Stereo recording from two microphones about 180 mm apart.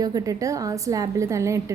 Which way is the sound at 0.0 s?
20° right (ahead or behind).